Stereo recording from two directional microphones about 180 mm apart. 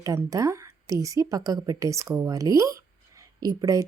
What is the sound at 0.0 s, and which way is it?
A woman's voice, 15° right (ahead or behind).